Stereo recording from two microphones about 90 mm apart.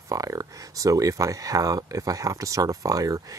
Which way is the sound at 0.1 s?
40° right (ahead or behind).